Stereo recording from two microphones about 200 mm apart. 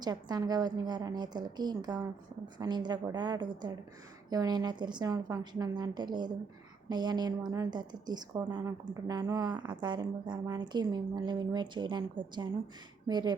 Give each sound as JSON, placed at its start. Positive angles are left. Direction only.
{"t": 0.0, "sound": "a woman's voice", "side_deg": -20}